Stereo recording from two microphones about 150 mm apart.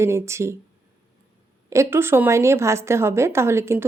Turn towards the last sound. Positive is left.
turn(degrees=-15)  # may be behind; listen again after turning